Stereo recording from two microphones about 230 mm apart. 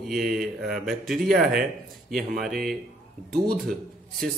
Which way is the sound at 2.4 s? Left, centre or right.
Centre.